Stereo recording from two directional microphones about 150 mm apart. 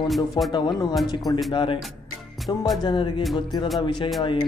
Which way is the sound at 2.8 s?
30° left (ahead or behind).